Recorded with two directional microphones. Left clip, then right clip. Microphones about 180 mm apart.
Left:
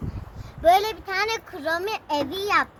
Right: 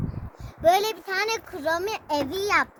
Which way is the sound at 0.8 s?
25° right (ahead or behind).